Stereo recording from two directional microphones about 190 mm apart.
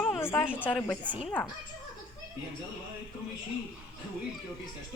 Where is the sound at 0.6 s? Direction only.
5° left (ahead or behind).